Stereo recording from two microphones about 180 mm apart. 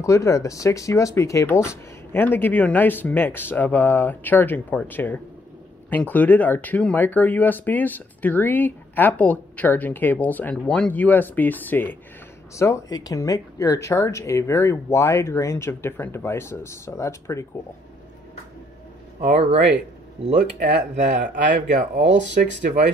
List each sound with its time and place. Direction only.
0.0 s speech: 15° left (ahead or behind)
20.5 s speech: 40° right (ahead or behind)